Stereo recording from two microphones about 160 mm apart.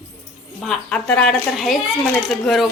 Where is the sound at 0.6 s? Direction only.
5° left (ahead or behind).